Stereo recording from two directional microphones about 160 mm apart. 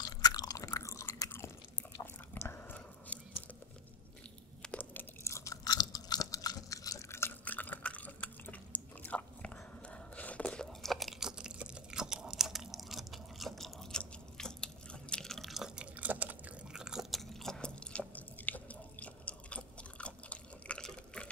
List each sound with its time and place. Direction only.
0.0 s chewing: 25° left (ahead or behind)
2.3 s biting: 15° left (ahead or behind)
4.6 s chewing: 10° left (ahead or behind)